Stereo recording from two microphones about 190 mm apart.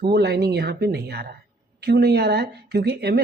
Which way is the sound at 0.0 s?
60° right (ahead or behind).